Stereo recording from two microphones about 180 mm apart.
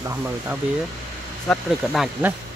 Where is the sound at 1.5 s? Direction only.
Centre (ahead or behind).